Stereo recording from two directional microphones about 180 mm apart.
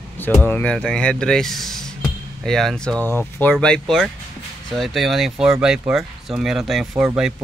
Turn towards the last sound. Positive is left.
turn(degrees=-5)  # may be behind; listen again after turning